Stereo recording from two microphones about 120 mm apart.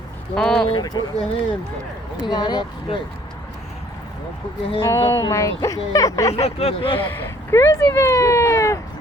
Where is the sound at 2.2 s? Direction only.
35° left (ahead or behind).